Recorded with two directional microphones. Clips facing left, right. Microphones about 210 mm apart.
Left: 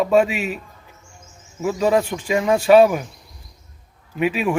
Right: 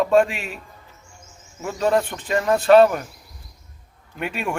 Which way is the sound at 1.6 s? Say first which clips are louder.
Left 2 dB; centre (ahead or behind).